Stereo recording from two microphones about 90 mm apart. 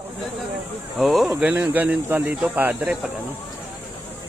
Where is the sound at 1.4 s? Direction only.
20° right (ahead or behind).